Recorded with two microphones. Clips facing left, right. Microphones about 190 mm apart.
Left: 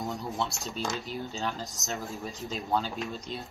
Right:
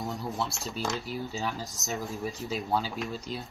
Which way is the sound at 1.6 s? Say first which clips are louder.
Even; 15° left (ahead or behind).